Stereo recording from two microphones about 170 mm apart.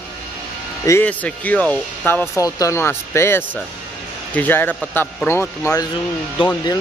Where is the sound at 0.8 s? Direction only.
10° left (ahead or behind).